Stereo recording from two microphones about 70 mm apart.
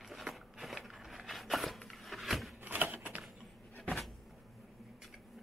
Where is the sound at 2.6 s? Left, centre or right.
Right.